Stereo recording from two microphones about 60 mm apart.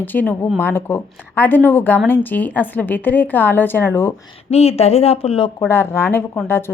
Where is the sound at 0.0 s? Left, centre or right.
Left.